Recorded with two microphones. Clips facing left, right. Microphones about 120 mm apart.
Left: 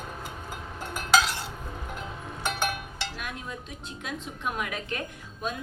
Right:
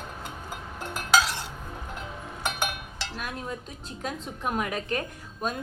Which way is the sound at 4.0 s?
40° right (ahead or behind).